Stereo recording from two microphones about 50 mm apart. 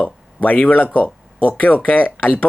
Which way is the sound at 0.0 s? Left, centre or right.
Left.